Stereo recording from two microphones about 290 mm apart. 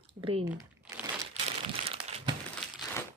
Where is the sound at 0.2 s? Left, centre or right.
Centre.